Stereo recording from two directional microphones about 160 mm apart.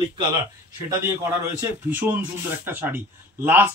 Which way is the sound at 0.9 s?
15° right (ahead or behind).